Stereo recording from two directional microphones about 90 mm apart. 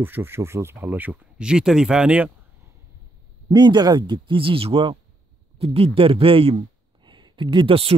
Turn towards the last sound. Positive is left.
turn(degrees=-85)